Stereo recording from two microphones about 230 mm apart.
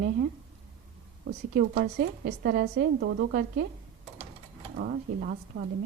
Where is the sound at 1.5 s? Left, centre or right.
Right.